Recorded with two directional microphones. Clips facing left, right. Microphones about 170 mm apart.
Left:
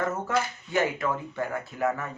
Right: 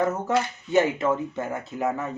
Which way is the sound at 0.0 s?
20° right (ahead or behind).